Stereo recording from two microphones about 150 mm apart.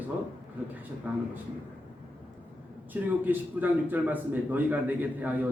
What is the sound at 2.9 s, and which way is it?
A man's voice, 10° right (ahead or behind).